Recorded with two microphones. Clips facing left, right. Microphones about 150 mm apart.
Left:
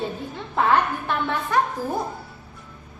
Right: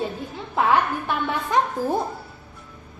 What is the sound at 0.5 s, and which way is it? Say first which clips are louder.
Speech: even; 5° right (ahead or behind).